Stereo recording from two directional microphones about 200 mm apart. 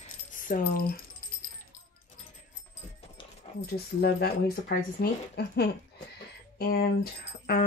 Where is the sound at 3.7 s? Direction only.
50° left (ahead or behind).